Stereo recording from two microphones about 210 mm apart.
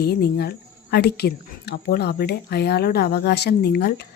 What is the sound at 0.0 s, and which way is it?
A woman's voice, 50° left (ahead or behind).